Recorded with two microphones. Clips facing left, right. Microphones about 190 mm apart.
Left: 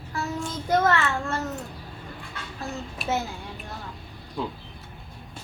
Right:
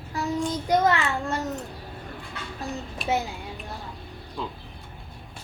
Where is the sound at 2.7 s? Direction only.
Centre (ahead or behind).